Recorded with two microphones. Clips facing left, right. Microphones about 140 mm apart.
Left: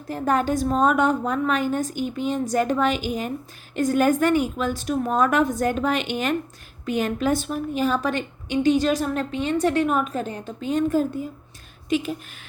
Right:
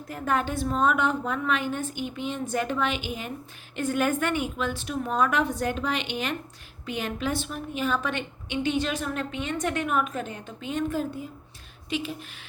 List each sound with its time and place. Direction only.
0.1 s a woman's voice: 40° left (ahead or behind)